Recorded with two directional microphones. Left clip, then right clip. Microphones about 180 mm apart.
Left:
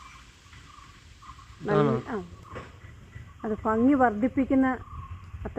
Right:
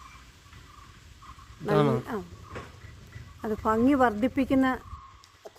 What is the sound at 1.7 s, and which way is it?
Speech, 35° right (ahead or behind).